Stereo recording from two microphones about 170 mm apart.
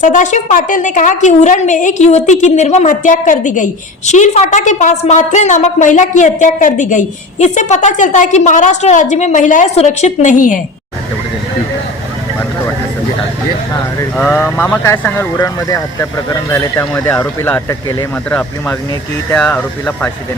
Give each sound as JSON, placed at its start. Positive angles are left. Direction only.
{"t": 0.0, "sound": "a woman's voice", "side_deg": 45}
{"t": 14.2, "sound": "speech", "side_deg": 10}